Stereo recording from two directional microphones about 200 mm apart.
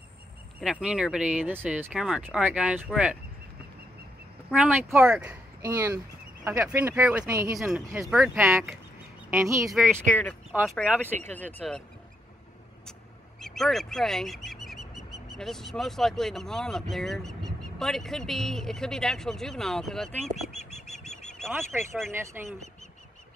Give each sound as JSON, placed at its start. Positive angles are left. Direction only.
{"t": 0.6, "sound": "speech", "side_deg": -5}
{"t": 4.5, "sound": "speech", "side_deg": -5}
{"t": 7.5, "sound": "speech", "side_deg": 0}
{"t": 7.9, "sound": "speech", "side_deg": -10}
{"t": 9.8, "sound": "speech", "side_deg": 5}
{"t": 11.3, "sound": "speech", "side_deg": 5}
{"t": 13.4, "sound": "speech", "side_deg": 0}
{"t": 21.5, "sound": "speech", "side_deg": -10}